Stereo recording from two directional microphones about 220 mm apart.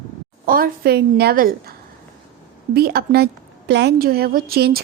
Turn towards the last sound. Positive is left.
turn(degrees=-45)  # may be behind; listen again after turning